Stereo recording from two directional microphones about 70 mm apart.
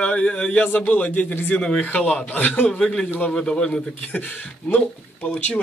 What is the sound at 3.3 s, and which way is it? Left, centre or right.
Speech, centre.